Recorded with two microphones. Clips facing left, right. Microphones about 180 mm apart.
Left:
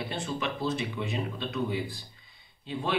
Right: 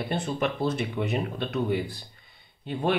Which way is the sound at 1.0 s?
60° right (ahead or behind).